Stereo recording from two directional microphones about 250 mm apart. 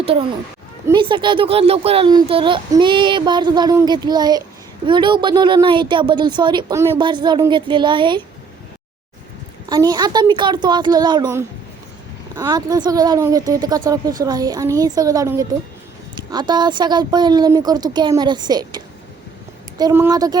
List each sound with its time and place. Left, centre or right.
0.0 s a child's voice: right
9.6 s speech: centre
19.8 s speech: centre